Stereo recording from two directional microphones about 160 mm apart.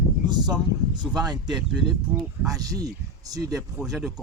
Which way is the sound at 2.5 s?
20° right (ahead or behind).